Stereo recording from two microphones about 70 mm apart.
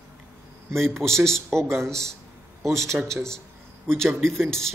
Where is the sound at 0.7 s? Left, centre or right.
Right.